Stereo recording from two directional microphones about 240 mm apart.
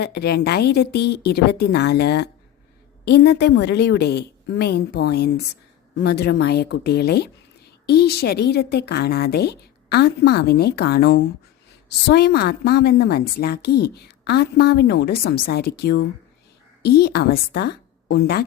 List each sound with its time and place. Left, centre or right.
0.0 s a woman's voice: left